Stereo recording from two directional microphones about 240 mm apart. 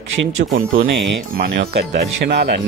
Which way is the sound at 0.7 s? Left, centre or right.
Right.